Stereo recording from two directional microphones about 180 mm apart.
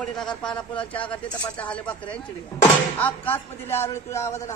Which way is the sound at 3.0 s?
10° left (ahead or behind).